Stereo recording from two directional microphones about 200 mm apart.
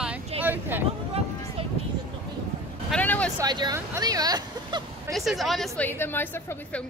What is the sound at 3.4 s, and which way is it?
Speech, 20° right (ahead or behind).